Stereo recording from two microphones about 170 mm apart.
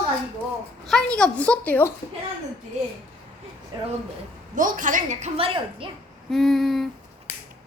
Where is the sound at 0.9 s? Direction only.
5° left (ahead or behind).